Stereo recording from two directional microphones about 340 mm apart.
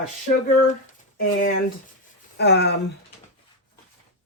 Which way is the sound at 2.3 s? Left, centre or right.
Left.